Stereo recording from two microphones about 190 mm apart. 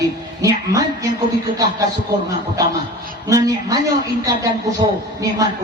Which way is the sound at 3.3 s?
20° right (ahead or behind).